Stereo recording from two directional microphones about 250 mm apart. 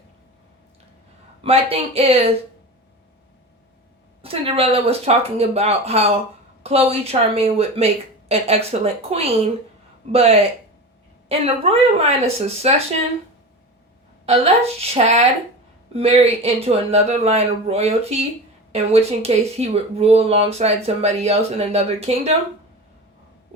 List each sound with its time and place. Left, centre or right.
1.5 s speech: right
4.2 s speech: right
14.3 s speech: right